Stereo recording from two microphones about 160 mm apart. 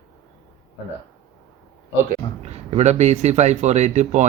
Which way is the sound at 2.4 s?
45° right (ahead or behind).